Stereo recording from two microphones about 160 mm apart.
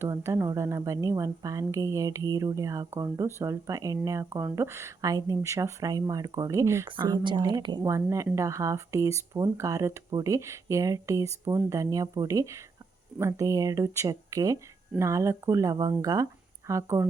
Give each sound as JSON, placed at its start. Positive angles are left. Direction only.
{"t": 0.0, "sound": "speech", "side_deg": -15}
{"t": 6.9, "sound": "speech", "side_deg": -30}